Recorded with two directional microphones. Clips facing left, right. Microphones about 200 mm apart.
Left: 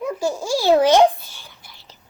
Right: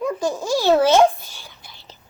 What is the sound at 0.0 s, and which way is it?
A child's voice, 10° left (ahead or behind).